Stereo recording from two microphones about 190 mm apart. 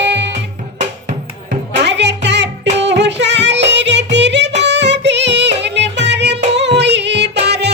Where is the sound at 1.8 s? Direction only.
65° right (ahead or behind).